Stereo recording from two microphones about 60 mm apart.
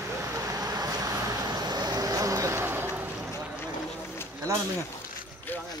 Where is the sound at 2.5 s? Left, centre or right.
Right.